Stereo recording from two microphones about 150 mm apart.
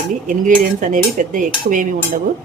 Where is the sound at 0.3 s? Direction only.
60° right (ahead or behind).